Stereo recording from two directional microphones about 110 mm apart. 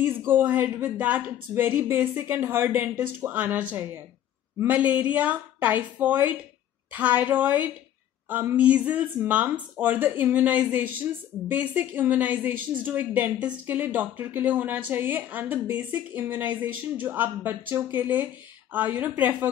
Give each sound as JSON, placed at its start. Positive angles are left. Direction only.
{"t": 0.4, "sound": "speech", "side_deg": -15}